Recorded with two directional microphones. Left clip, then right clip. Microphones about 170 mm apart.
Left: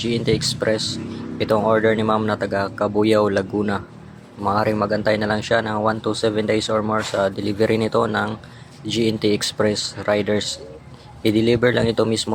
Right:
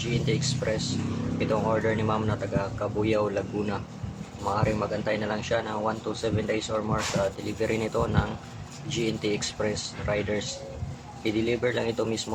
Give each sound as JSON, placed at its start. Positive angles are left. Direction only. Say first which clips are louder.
{"t": 0.0, "sound": "speech", "louder": "left 8 dB", "side_deg": 45}